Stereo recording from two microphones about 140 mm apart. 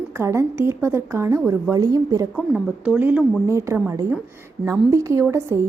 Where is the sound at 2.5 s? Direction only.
10° right (ahead or behind).